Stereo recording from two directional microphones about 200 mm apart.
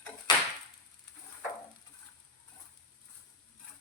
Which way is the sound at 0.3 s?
20° left (ahead or behind).